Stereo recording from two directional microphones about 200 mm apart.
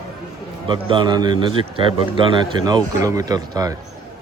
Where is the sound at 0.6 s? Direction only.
25° right (ahead or behind).